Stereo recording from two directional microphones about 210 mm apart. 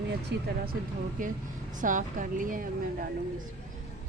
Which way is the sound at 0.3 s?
50° right (ahead or behind).